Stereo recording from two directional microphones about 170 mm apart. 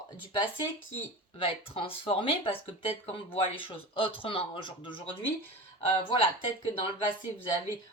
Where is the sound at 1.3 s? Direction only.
35° left (ahead or behind).